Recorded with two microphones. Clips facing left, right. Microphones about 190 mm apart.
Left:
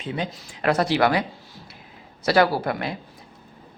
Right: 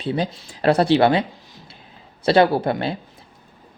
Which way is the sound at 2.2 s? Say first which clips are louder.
Right 4 dB; 25° right (ahead or behind).